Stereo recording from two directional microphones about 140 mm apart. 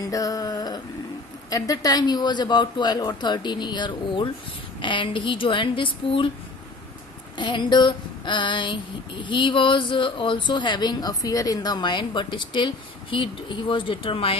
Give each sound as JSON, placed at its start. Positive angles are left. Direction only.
{"t": 0.1, "sound": "a sound", "side_deg": 25}
{"t": 1.5, "sound": "speech", "side_deg": 25}
{"t": 7.3, "sound": "speech", "side_deg": 35}